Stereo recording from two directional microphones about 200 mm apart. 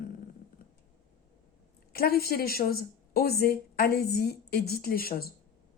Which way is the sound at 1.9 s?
50° left (ahead or behind).